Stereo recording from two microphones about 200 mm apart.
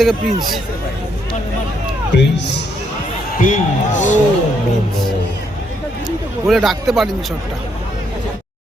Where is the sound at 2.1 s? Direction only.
60° left (ahead or behind).